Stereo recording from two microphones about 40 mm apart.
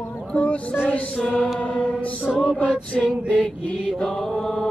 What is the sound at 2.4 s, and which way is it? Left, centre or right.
Chant, left.